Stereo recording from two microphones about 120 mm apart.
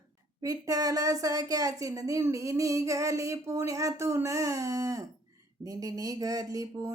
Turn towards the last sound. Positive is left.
turn(degrees=-30)  # may be behind; listen again after turning